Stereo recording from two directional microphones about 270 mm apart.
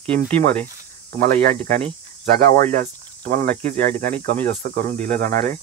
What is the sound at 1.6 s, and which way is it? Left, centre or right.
Speech, right.